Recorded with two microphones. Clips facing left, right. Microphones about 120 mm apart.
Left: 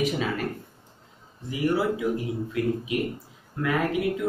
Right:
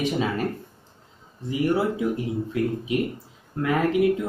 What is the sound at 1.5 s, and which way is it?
Speech, 25° right (ahead or behind).